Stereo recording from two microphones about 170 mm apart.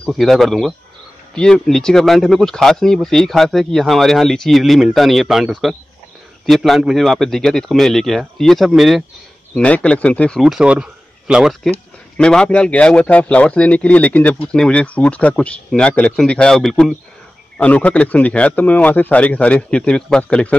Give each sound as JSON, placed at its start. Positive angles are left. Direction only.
{"t": 0.0, "sound": "a man's voice", "side_deg": 0}